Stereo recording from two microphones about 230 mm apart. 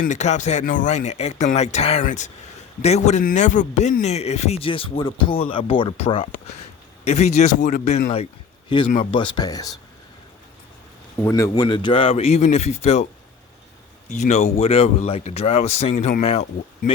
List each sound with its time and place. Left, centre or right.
0.0 s a man's voice: left; by 9.7 s centre
11.2 s a man's voice: centre; by 13.1 s left
14.1 s a man's voice: left